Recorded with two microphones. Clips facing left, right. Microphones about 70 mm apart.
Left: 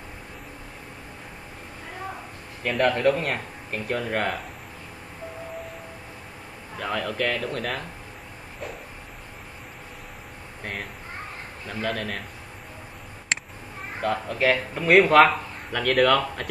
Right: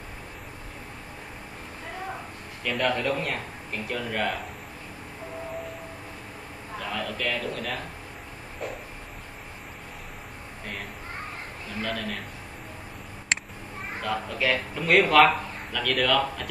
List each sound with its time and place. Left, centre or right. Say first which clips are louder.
2.7 s a man's voice: left 5 dB; left
6.8 s a man's voice: left 4 dB; left
10.6 s a man's voice: left 3 dB; left
13.3 s a sound: even; centre
14.0 s speech: left 4 dB; left
15.7 s a man's voice: left 4 dB; left